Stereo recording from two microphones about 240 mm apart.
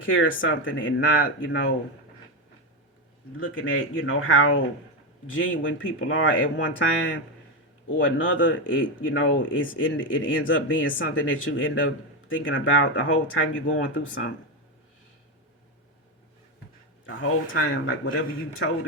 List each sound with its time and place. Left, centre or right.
0.0 s speech: left
3.4 s a man's voice: left
17.5 s a man's voice: left